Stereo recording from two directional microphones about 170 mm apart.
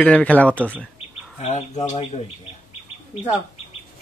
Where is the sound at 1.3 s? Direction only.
40° left (ahead or behind).